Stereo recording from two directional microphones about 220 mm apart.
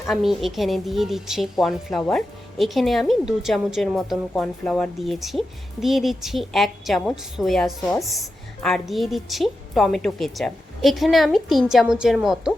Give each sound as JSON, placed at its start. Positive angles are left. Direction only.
{"t": 0.1, "sound": "speech", "side_deg": 0}